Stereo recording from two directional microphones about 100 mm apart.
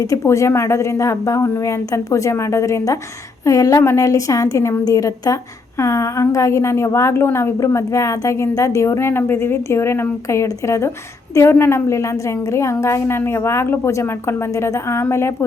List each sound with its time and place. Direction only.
0.0 s a woman's voice: 30° left (ahead or behind)